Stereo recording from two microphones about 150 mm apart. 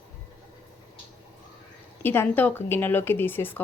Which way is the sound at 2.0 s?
15° left (ahead or behind).